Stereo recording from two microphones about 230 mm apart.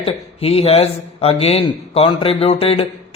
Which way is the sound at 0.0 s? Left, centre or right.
Left.